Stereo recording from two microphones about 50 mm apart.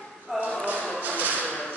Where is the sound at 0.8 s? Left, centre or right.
Left.